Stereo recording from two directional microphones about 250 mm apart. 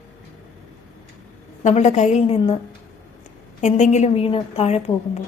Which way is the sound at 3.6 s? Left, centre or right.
Left.